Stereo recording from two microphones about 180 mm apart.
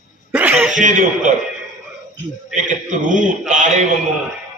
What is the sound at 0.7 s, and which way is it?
Speech, 45° right (ahead or behind).